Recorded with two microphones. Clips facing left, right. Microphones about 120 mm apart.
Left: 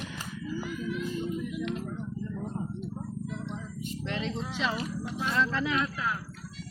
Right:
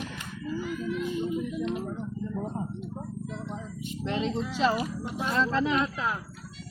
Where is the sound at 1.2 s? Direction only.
25° right (ahead or behind).